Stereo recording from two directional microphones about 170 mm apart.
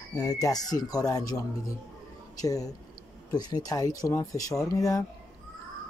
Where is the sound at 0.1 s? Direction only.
20° left (ahead or behind).